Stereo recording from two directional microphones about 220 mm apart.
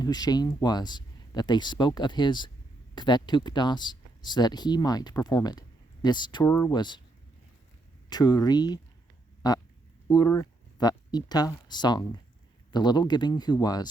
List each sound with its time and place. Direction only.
0.0 s speech: 20° left (ahead or behind)
8.1 s speech: 20° left (ahead or behind)
9.4 s a sound: 20° left (ahead or behind)
10.1 s speech: 15° left (ahead or behind)